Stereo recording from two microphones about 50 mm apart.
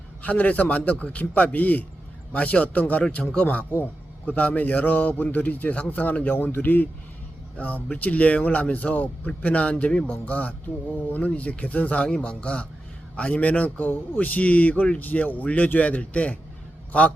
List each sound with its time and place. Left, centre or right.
0.2 s speech: left